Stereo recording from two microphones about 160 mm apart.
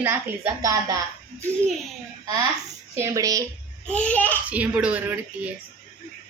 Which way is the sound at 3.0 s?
20° right (ahead or behind).